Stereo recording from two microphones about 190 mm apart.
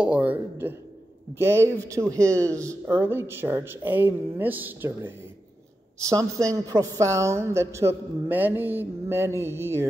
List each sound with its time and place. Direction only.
0.0 s a woman's voice: 5° right (ahead or behind)